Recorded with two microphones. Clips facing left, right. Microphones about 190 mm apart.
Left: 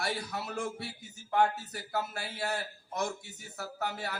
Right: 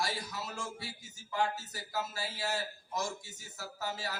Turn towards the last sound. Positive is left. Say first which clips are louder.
# left 3 dB
turn(degrees=60)  # may be behind; listen again after turning